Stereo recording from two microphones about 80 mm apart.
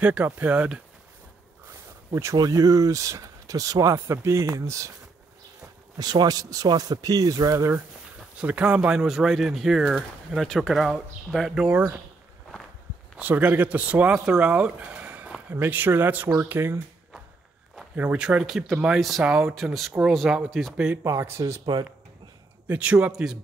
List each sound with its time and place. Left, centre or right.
0.0 s speech: centre
2.3 s speech: right
5.9 s speech: right
8.4 s speech: centre
9.0 s speech: centre
11.7 s speech: centre
13.2 s speech: centre
17.9 s speech: centre
20.7 s speech: centre
21.0 s speech: right
22.7 s speech: centre